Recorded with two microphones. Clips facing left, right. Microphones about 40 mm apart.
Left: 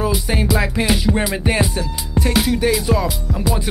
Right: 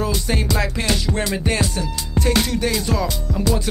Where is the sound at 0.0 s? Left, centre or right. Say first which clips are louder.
Left 2 dB; centre.